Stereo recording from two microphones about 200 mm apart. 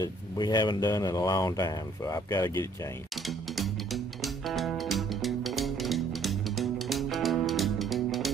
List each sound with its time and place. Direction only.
0.0 s speech: 20° left (ahead or behind)
3.5 s music: centre (ahead or behind)